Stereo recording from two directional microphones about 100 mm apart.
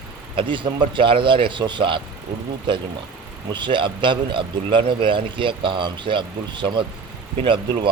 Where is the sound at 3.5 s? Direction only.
55° right (ahead or behind).